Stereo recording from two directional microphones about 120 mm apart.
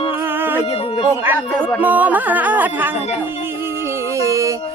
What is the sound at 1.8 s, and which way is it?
Music, 15° right (ahead or behind).